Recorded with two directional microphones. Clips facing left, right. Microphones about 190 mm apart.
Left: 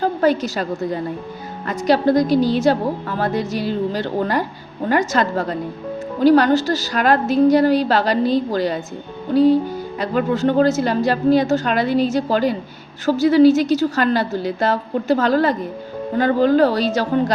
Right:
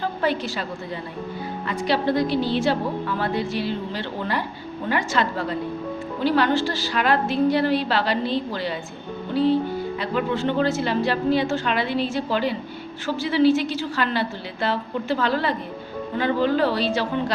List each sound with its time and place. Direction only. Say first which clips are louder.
0.0 s a woman's voice: left 7 dB; 40° left (ahead or behind)